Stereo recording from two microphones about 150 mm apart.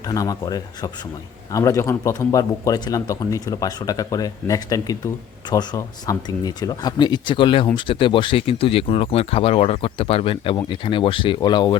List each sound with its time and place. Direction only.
0.0 s a man's voice: 25° left (ahead or behind)